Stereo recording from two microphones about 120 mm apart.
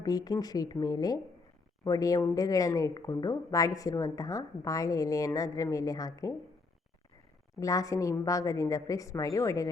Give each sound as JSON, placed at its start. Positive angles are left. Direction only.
{"t": 0.0, "sound": "a woman's voice", "side_deg": 35}
{"t": 7.6, "sound": "a woman's voice", "side_deg": 30}